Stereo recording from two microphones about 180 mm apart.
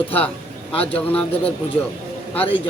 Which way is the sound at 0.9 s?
5° left (ahead or behind).